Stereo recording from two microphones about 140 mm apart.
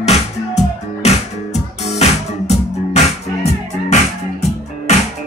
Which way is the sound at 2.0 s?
50° left (ahead or behind).